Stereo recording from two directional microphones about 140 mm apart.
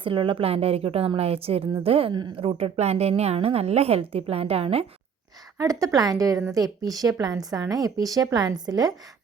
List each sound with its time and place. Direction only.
0.0 s a woman's voice: 40° right (ahead or behind)
5.5 s a woman's voice: 25° right (ahead or behind)